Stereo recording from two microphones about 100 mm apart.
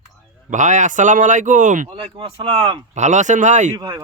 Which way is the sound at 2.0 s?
60° right (ahead or behind).